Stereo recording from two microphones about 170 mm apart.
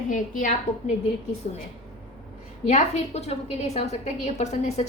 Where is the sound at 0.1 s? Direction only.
50° left (ahead or behind).